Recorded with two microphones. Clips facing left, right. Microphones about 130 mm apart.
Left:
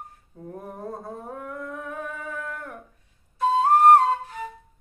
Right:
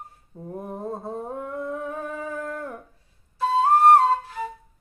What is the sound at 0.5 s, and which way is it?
Humming, 20° right (ahead or behind).